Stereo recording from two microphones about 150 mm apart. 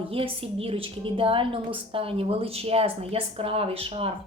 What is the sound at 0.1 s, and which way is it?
A woman's voice, 40° right (ahead or behind).